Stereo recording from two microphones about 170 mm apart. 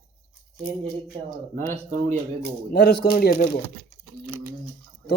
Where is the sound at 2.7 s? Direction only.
80° left.